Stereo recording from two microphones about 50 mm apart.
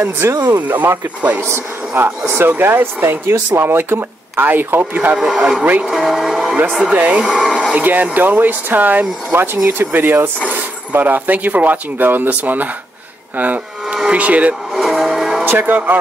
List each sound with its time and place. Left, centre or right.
0.0 s speech: right
0.6 s speech: right
2.2 s speech: right
5.1 s a man's voice: centre
5.6 s speech: right
5.9 s a man's voice: centre
7.7 s speech: right
14.7 s vehicle: centre
15.4 s speech: right